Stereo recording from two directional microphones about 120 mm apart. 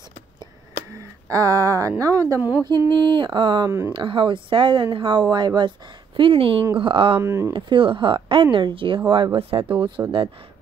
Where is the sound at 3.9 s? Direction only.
45° right (ahead or behind).